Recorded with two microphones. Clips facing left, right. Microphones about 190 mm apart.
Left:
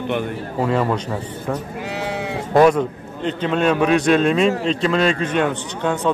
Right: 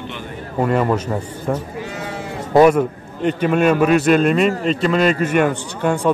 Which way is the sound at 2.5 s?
10° right (ahead or behind).